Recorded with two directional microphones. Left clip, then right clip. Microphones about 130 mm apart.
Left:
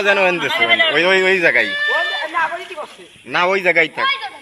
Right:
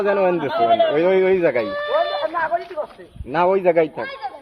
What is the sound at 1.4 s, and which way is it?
Speech, 60° right (ahead or behind).